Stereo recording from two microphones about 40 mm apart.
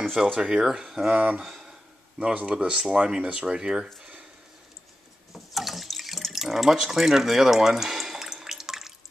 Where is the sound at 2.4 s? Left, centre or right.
Right.